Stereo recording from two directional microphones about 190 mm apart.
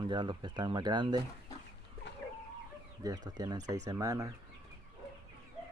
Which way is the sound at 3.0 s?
20° right (ahead or behind).